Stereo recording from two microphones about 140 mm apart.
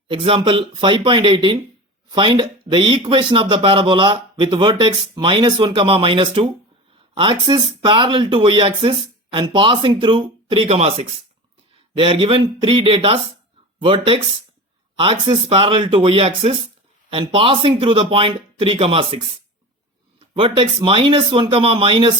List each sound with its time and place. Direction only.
0.1 s speech: 40° right (ahead or behind)